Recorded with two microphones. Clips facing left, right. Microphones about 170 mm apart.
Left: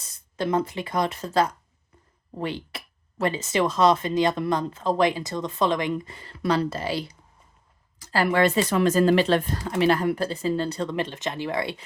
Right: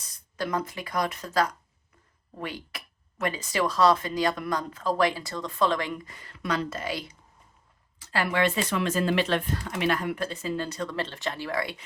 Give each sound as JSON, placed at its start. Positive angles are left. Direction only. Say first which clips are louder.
{"t": 0.3, "sound": "speech", "louder": "left 5 dB", "side_deg": 25}
{"t": 10.9, "sound": "speech", "louder": "left 4 dB", "side_deg": 20}